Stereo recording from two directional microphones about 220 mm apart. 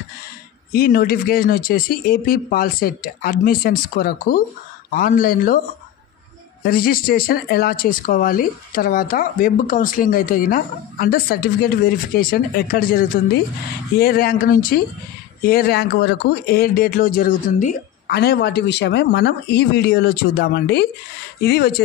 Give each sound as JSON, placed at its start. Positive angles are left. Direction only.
{"t": 0.7, "sound": "speech", "side_deg": 40}
{"t": 6.6, "sound": "speech", "side_deg": 40}
{"t": 18.0, "sound": "speech", "side_deg": 50}